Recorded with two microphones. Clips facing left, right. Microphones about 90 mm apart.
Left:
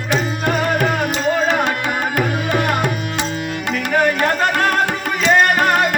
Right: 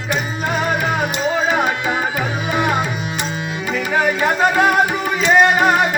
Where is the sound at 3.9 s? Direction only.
10° right (ahead or behind).